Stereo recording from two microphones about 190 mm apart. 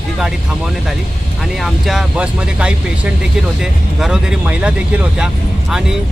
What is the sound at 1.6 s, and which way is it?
Speech, centre (ahead or behind).